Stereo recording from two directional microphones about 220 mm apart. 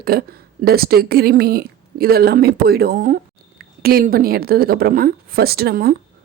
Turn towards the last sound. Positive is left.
turn(degrees=-45)  # may be behind; listen again after turning